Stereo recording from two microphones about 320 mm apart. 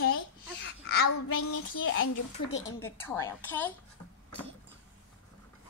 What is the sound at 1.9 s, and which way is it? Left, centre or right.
Speech, left.